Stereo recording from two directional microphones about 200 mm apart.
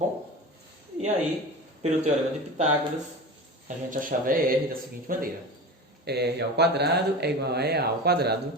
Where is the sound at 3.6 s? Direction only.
40° right (ahead or behind).